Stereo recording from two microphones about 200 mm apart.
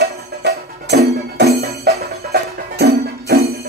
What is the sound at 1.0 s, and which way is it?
Music, 50° right (ahead or behind).